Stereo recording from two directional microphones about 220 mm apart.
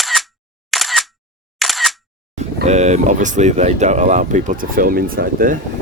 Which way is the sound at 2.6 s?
30° right (ahead or behind).